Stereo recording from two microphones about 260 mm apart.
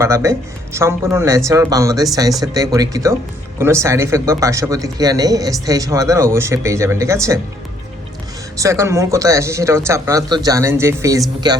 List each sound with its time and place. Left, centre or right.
0.0 s speech: centre
8.5 s speech: centre